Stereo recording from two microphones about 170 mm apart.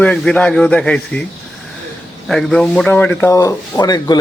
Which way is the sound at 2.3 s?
5° left (ahead or behind).